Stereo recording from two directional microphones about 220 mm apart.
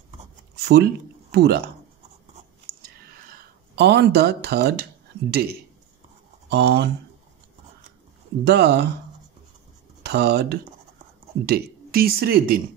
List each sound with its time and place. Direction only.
0.6 s speech: 45° right (ahead or behind)
3.3 s speech: 50° right (ahead or behind)
8.5 s speech: 50° right (ahead or behind)
10.0 s speech: 50° right (ahead or behind)